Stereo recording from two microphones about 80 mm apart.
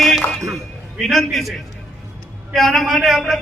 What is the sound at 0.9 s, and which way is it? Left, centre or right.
A man's voice, centre.